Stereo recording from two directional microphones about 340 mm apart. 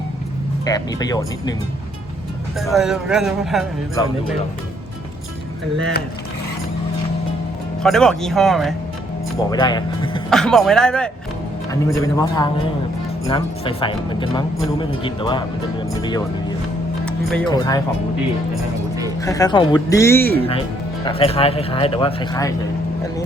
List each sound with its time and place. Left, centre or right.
0.6 s speech: centre
2.6 s speech: centre
7.8 s speech: centre
9.5 s speech: centre
10.2 s speech: centre
17.1 s speech: centre
19.2 s speech: centre